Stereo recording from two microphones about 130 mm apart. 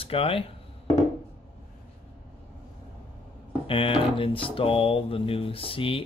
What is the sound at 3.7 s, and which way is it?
Speech, 45° left (ahead or behind).